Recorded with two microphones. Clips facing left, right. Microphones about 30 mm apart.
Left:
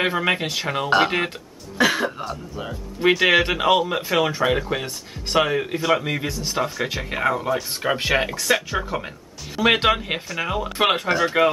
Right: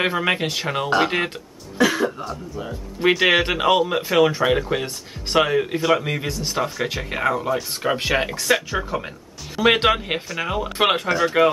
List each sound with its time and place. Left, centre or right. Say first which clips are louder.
0.0 s speech: even; centre
1.8 s speech: right 1 dB; centre
2.7 s speech: even; centre